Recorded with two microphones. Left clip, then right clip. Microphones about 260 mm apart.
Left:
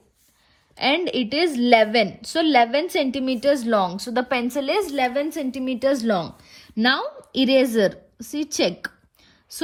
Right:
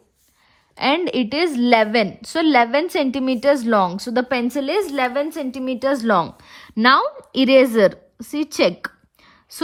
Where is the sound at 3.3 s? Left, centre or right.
Centre.